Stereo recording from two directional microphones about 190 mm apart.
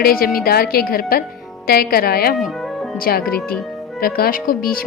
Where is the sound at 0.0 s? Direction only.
50° left (ahead or behind).